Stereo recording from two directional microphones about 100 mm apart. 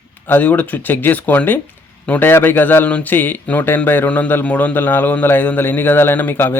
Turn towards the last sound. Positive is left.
turn(degrees=20)  # may be behind; listen again after turning